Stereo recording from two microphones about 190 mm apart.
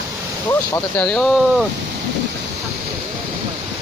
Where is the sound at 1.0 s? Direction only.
Centre (ahead or behind).